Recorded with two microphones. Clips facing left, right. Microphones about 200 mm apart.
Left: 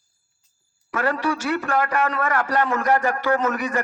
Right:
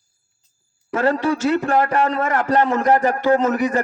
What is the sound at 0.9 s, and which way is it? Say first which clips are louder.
A man's voice: right 5 dB; 25° right (ahead or behind).